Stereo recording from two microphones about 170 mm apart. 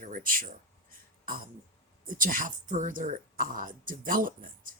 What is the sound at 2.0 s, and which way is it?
Speech, 55° right (ahead or behind).